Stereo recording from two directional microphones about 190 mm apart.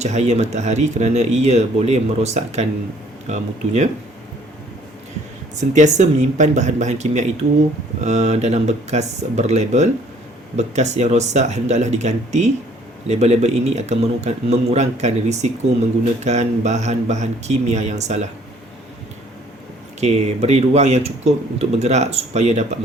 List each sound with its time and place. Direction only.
0.0 s speech: 35° right (ahead or behind)
5.5 s speech: 40° right (ahead or behind)
20.0 s speech: 35° right (ahead or behind)